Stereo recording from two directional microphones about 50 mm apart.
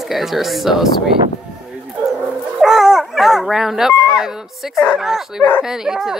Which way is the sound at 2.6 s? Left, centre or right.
Centre.